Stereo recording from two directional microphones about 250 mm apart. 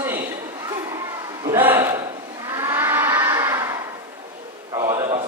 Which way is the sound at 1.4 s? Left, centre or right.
Centre.